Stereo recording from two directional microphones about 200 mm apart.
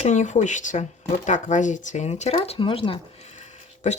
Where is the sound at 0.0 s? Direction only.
35° left (ahead or behind).